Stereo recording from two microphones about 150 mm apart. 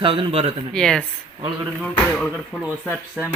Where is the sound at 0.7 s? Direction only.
5° left (ahead or behind).